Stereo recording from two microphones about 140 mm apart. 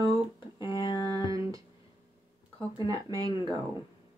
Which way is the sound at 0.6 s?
30° left (ahead or behind).